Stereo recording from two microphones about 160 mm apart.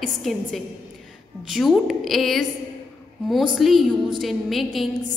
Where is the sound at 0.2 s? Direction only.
Centre (ahead or behind).